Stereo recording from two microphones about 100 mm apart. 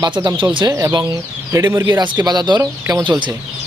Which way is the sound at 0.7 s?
30° right (ahead or behind).